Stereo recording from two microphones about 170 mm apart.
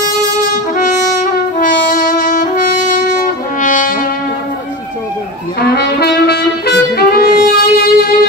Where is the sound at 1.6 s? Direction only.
50° left (ahead or behind).